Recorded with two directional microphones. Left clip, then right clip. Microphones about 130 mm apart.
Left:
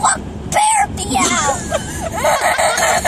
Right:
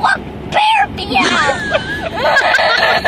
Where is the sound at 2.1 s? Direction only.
45° left (ahead or behind).